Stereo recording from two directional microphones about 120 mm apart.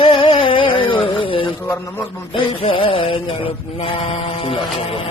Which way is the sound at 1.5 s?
20° left (ahead or behind).